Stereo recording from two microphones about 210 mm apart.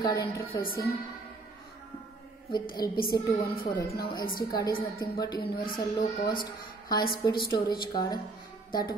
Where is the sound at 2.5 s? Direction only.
20° left (ahead or behind).